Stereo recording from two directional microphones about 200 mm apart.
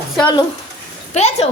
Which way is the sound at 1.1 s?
30° left (ahead or behind).